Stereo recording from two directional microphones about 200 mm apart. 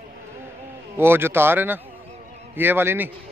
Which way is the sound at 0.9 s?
10° right (ahead or behind).